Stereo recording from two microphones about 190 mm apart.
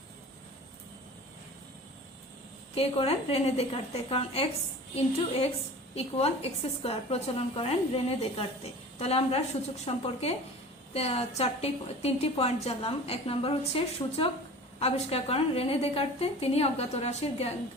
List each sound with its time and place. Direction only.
2.7 s a woman's voice: 30° left (ahead or behind)